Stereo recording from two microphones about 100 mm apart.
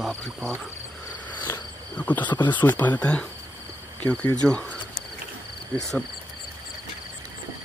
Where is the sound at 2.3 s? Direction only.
50° left (ahead or behind).